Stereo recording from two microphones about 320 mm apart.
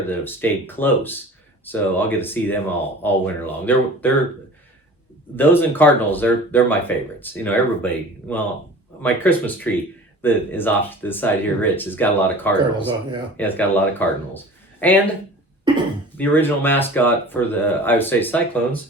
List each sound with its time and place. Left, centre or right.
0.1 s speech: centre
5.4 s speech: centre
15.7 s throat clearing: centre
16.1 s speech: centre